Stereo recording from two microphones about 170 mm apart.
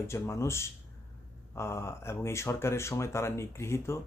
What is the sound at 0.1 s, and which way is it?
Speech, 15° left (ahead or behind).